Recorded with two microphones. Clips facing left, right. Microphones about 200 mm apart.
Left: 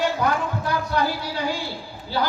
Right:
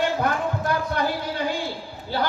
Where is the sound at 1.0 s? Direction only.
55° right (ahead or behind).